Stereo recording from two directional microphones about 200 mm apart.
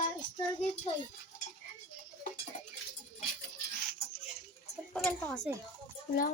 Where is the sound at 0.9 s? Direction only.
35° left (ahead or behind).